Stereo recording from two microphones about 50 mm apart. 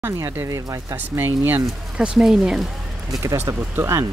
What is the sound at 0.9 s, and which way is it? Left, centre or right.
Speech, right.